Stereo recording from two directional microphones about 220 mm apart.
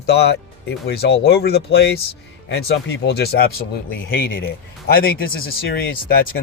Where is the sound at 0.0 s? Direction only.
50° left (ahead or behind).